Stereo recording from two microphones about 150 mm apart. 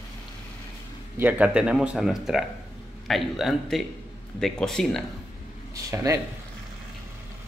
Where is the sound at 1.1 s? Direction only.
10° right (ahead or behind).